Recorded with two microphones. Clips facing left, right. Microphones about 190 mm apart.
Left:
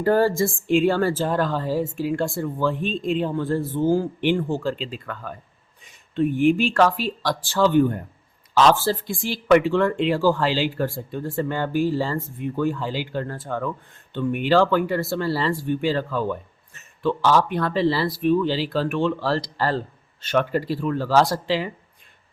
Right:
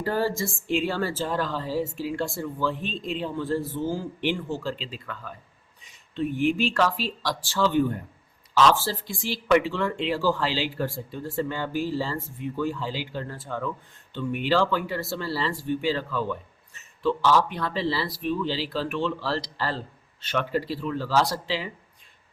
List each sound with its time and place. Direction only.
0.0 s speech: 50° left (ahead or behind)